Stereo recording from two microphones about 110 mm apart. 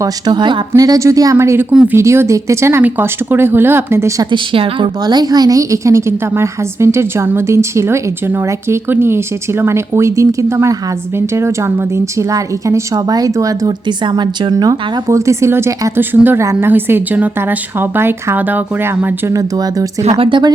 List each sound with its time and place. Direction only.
0.0 s speech: 40° right (ahead or behind)
0.8 s a woman's voice: 30° right (ahead or behind)
1.7 s speech: 10° right (ahead or behind)
2.0 s a woman's voice: 25° right (ahead or behind)
4.5 s speech: 55° right (ahead or behind)
5.0 s a woman's voice: 35° right (ahead or behind); by 19.3 s 20° right (ahead or behind)
19.3 s speech: 35° right (ahead or behind)
20.0 s speech: 65° right (ahead or behind)